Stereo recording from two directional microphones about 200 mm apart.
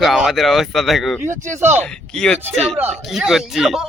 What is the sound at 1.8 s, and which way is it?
Speech, 5° left (ahead or behind).